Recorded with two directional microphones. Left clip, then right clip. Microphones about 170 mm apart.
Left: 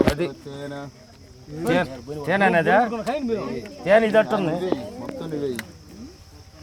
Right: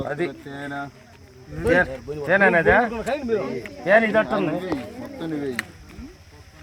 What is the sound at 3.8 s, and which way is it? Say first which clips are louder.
Speech: left 1 dB; 45° left (ahead or behind).